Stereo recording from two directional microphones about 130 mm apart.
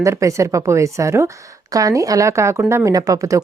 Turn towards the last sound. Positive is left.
turn(degrees=-25)  # may be behind; listen again after turning